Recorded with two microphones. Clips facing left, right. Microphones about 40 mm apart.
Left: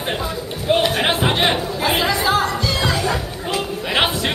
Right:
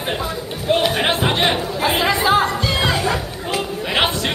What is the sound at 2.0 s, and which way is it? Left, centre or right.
Chatter, right.